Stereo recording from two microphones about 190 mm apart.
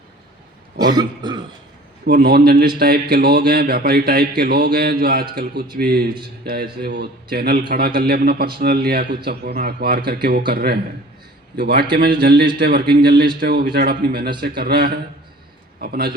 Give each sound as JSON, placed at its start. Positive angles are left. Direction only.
{"t": 0.9, "sound": "cough", "side_deg": -25}
{"t": 2.0, "sound": "a man's voice", "side_deg": -55}